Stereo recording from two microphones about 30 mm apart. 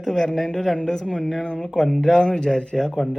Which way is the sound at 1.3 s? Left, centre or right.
Centre.